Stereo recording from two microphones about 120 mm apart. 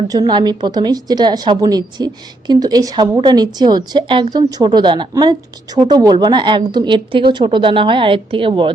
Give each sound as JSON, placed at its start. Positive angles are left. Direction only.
{"t": 0.1, "sound": "a woman's voice", "side_deg": -35}